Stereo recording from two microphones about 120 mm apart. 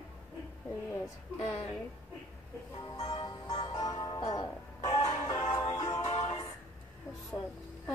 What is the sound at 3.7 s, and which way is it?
Music, 55° left (ahead or behind).